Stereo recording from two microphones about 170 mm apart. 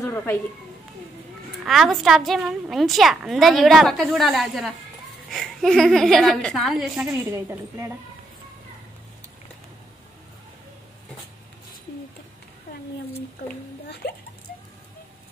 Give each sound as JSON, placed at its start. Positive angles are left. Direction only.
{"t": 0.0, "sound": "a sound", "side_deg": 15}
{"t": 1.6, "sound": "a woman's voice", "side_deg": 0}
{"t": 7.1, "sound": "a woman's voice", "side_deg": -15}
{"t": 13.8, "sound": "speech", "side_deg": 75}